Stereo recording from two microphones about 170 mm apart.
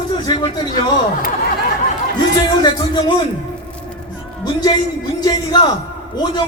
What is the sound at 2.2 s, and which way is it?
Speech, 25° left (ahead or behind).